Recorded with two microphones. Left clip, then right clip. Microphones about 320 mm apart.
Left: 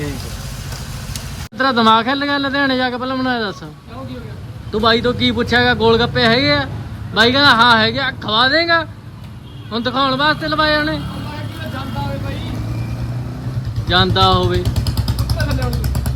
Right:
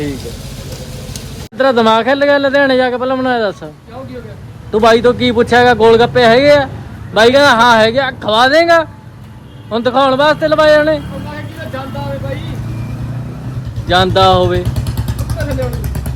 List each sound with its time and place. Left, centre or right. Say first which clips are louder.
1.1 s speech: right 5 dB; centre
4.9 s speech: right 5 dB; centre
13.8 s speech: right 4 dB; centre
14.7 s vehicle: even; left